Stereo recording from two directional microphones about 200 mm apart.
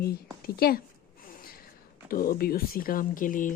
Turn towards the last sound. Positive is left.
turn(degrees=40)  # may be behind; listen again after turning